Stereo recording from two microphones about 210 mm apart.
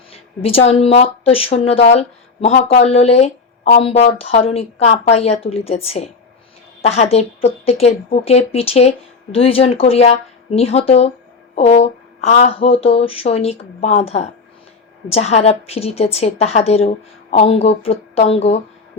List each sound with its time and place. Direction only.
0.1 s speech: 30° left (ahead or behind)